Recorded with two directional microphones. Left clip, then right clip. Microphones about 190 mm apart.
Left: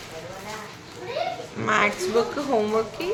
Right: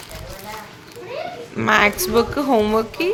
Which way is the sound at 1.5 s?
55° right (ahead or behind).